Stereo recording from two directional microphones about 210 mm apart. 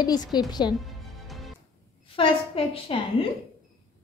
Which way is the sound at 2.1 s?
25° left (ahead or behind).